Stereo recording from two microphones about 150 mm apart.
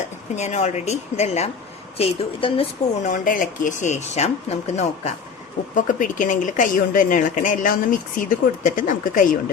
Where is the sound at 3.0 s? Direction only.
60° left (ahead or behind).